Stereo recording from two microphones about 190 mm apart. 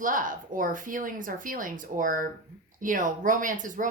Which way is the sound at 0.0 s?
45° right (ahead or behind).